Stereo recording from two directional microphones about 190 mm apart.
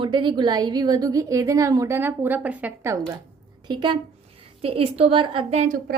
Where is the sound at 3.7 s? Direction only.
25° right (ahead or behind).